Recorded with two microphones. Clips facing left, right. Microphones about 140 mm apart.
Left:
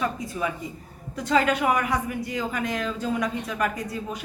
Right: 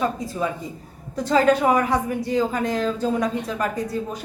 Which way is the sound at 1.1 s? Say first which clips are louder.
Right 5 dB; 35° right (ahead or behind).